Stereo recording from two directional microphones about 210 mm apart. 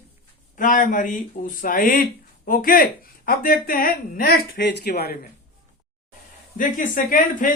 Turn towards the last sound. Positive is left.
turn(degrees=40)  # may be behind; listen again after turning